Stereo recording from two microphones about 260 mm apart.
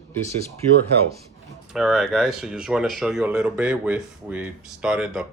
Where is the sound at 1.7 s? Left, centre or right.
Centre.